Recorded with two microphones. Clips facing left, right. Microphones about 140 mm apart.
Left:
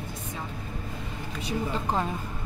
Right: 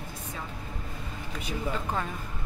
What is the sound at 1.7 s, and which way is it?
Speech, 30° left (ahead or behind).